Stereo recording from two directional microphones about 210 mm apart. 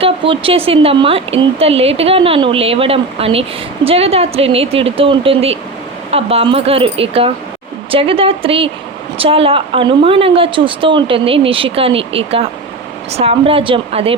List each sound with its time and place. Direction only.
0.0 s speech: 25° right (ahead or behind)